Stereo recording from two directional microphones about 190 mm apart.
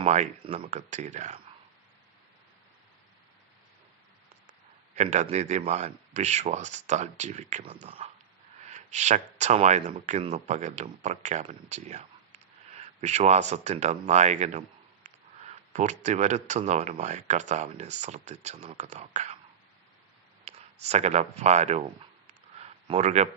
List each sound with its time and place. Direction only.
0.0 s speech: 35° right (ahead or behind)
4.9 s speech: 35° right (ahead or behind)
15.0 s a sound: 35° right (ahead or behind)
16.0 s speech: 35° right (ahead or behind)
20.4 s speech: 35° right (ahead or behind)
22.5 s a sound: 35° right (ahead or behind)